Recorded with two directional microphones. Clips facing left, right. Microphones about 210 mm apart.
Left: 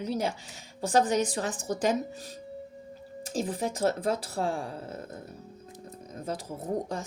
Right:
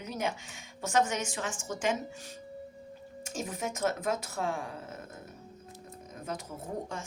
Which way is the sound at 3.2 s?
35° left (ahead or behind).